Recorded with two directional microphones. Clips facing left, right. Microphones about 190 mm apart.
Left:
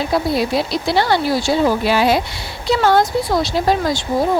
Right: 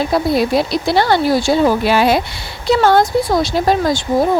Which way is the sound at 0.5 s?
50° right (ahead or behind).